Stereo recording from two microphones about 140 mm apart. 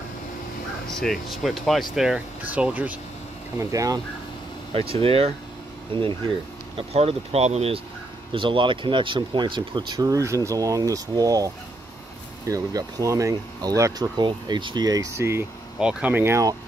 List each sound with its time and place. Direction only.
0.8 s speech: centre (ahead or behind)
3.5 s speech: 25° right (ahead or behind)
4.7 s speech: 45° right (ahead or behind)
8.3 s speech: 35° right (ahead or behind); by 15.4 s 20° right (ahead or behind)
15.8 s speech: 10° right (ahead or behind)